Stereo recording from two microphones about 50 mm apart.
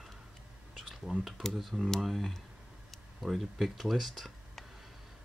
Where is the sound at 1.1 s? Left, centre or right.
Right.